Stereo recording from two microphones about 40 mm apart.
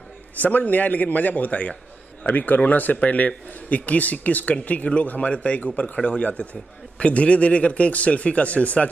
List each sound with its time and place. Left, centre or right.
0.4 s speech: left
2.2 s speech: left